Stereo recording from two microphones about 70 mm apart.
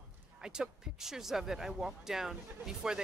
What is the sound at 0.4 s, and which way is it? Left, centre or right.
Speech, centre.